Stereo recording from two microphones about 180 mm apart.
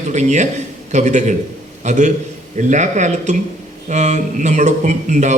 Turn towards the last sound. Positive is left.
turn(degrees=-40)  # may be behind; listen again after turning